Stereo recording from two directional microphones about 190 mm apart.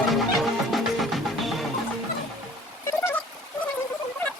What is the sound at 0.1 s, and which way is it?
Music, centre (ahead or behind).